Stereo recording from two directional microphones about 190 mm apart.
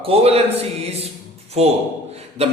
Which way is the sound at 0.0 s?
30° right (ahead or behind).